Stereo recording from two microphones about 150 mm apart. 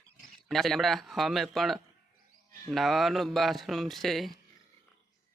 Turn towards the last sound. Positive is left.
turn(degrees=0)  # may be behind; listen again after turning